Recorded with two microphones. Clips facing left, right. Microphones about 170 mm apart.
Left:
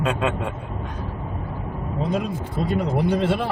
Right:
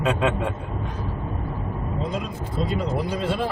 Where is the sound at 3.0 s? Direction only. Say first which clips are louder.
Left 5 dB; 60° left (ahead or behind).